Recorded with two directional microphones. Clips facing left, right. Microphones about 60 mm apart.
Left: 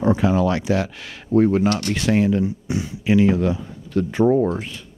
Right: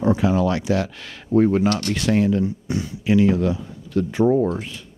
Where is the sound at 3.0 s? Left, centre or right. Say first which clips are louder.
Left 1 dB; left.